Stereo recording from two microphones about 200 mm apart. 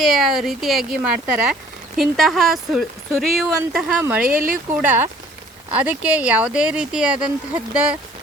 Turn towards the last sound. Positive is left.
turn(degrees=-5)  # may be behind; listen again after turning